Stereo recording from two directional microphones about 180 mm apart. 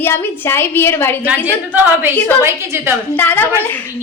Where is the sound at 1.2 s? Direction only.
10° right (ahead or behind).